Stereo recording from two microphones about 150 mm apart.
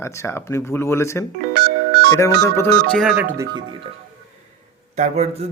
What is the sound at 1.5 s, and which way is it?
Music, 90° right.